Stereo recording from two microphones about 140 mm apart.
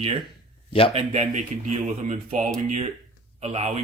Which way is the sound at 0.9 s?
50° right (ahead or behind).